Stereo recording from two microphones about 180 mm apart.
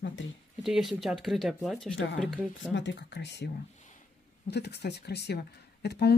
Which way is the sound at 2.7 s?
80° left.